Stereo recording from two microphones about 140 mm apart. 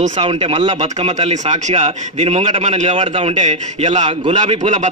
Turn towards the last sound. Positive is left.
turn(degrees=-55)  # may be behind; listen again after turning